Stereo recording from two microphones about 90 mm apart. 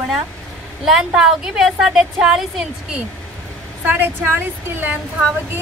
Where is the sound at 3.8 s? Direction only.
20° right (ahead or behind).